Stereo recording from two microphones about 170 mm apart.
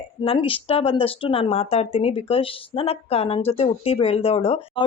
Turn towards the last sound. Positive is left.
turn(degrees=35)  # may be behind; listen again after turning